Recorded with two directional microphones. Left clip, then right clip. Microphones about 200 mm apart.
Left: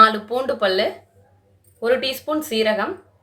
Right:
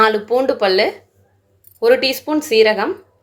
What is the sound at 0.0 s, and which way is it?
A woman's voice, 25° right (ahead or behind).